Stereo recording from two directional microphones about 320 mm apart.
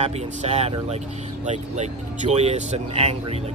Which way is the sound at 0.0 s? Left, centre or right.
Centre.